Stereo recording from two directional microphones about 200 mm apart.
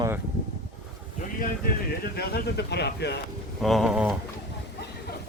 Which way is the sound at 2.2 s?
50° left (ahead or behind).